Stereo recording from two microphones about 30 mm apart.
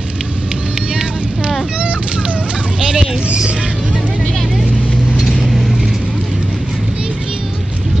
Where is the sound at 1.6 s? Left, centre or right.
Right.